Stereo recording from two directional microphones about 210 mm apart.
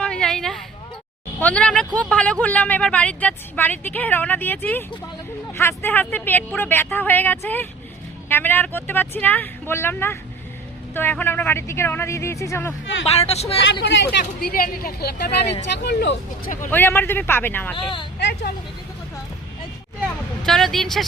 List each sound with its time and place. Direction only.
0.0 s a sound: 5° left (ahead or behind)
1.4 s speech: 5° left (ahead or behind)
12.8 s speech: 65° left (ahead or behind)
13.2 s speech: 30° left (ahead or behind)
13.8 s speech: 55° left (ahead or behind)
16.7 s speech: 10° left (ahead or behind)
18.2 s speech: 55° left (ahead or behind)
20.4 s a woman's voice: centre (ahead or behind)